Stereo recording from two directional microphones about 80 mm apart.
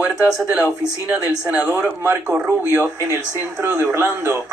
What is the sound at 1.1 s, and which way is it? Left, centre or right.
A man's voice, centre.